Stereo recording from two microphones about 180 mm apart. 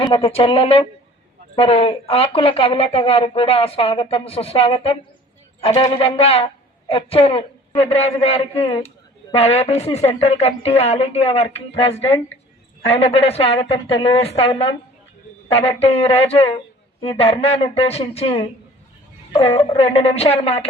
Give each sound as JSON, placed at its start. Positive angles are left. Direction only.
{"t": 0.0, "sound": "speech", "side_deg": 30}